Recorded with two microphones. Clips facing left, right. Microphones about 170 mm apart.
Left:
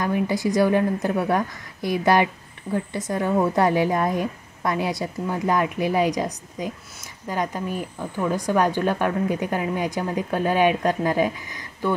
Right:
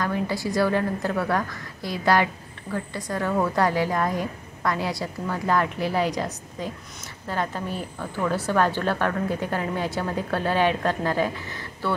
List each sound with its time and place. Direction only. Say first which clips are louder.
0.0 s a woman's voice: left 4 dB; 20° left (ahead or behind)